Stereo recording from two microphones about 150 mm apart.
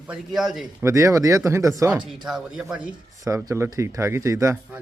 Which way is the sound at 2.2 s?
5° right (ahead or behind).